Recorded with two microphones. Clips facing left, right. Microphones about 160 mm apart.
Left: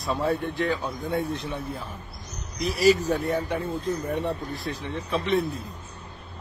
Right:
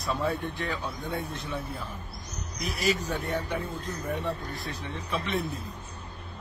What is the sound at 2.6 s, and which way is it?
Speech, 30° left (ahead or behind).